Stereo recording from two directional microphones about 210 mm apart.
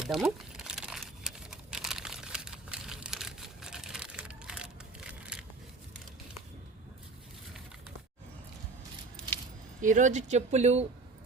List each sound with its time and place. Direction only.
0.0 s crumpling: centre (ahead or behind)
5.2 s a sound: 5° right (ahead or behind)
9.8 s speech: 35° right (ahead or behind)